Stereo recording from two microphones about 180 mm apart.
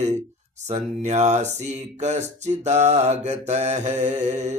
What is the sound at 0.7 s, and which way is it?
Speech, 40° right (ahead or behind).